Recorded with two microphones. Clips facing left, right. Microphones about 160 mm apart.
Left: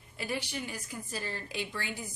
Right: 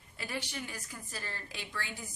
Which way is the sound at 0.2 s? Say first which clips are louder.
Left 4 dB; 15° left (ahead or behind).